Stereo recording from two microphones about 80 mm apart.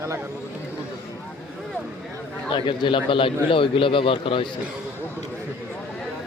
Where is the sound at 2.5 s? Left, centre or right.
Left.